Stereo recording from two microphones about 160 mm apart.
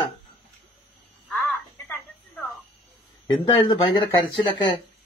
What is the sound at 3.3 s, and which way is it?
Speech, 30° left (ahead or behind).